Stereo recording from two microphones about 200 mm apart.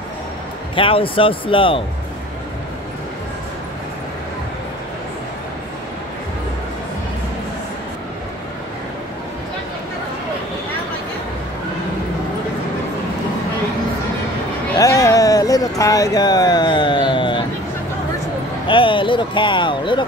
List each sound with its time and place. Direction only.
0.7 s speech: 25° left (ahead or behind)
14.8 s a sound: 15° left (ahead or behind)
18.7 s speech: 25° left (ahead or behind)